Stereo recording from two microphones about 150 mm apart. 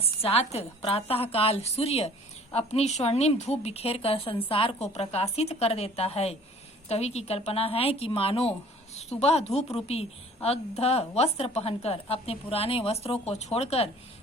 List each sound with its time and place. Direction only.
0.0 s a woman's voice: 40° left (ahead or behind)